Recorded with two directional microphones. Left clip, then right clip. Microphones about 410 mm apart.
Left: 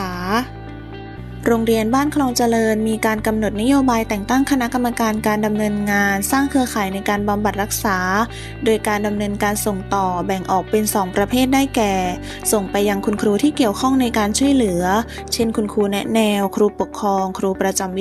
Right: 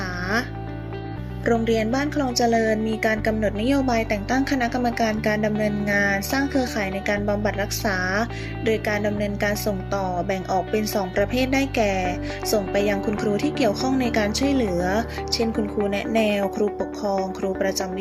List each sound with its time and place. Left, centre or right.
0.0 s music: centre
1.5 s speech: centre